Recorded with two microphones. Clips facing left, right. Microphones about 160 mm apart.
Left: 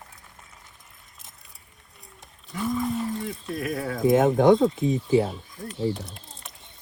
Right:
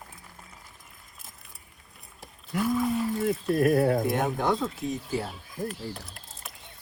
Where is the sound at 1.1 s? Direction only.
Centre (ahead or behind).